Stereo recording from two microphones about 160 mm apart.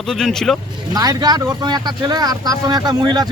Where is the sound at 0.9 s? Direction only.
25° right (ahead or behind).